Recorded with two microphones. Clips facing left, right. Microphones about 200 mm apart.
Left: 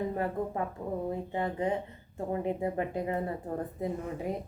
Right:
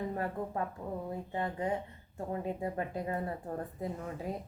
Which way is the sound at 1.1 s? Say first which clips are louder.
Left 4 dB; 20° left (ahead or behind).